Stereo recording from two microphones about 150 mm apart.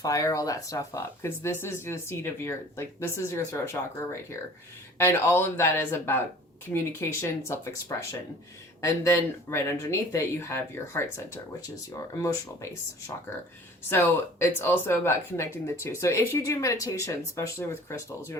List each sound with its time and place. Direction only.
0.0 s speech: 20° left (ahead or behind)
12.1 s speech: 20° left (ahead or behind)
13.9 s speech: 15° left (ahead or behind)